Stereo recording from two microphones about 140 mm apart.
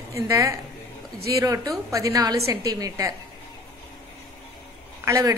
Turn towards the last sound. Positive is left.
turn(degrees=-25)  # may be behind; listen again after turning